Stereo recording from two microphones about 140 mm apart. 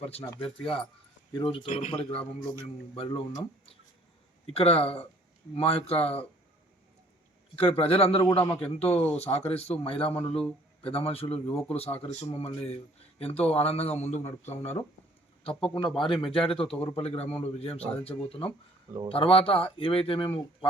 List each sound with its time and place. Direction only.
0.0 s a man's voice: 45° left (ahead or behind)
0.6 s speech: 5° left (ahead or behind)
1.5 s a man's voice: 40° left (ahead or behind)
4.4 s a man's voice: 45° left (ahead or behind)
7.5 s a man's voice: 45° left (ahead or behind)